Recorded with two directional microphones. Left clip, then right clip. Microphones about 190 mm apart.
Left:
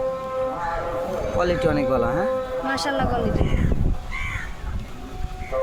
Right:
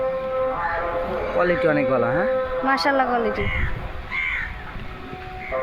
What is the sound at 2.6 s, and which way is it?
Speech, 35° right (ahead or behind).